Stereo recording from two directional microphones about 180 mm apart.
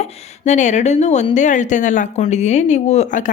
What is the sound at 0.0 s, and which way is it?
Speech, 40° left (ahead or behind).